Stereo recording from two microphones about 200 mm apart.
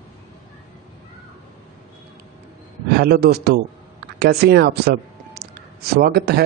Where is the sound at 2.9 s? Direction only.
50° right (ahead or behind).